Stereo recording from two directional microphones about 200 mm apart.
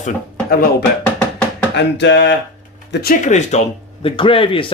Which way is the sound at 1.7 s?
60° left (ahead or behind).